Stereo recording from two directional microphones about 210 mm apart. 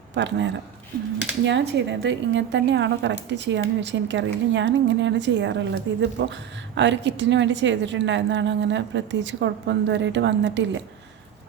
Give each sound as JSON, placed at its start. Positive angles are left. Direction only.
{"t": 0.1, "sound": "a woman's voice", "side_deg": -60}